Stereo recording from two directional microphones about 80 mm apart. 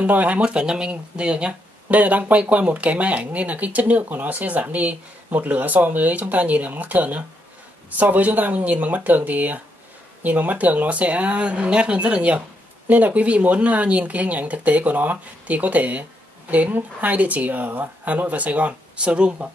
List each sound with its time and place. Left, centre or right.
0.0 s speech: centre